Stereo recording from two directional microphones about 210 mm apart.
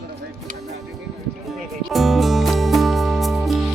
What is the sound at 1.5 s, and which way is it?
Music, centre (ahead or behind).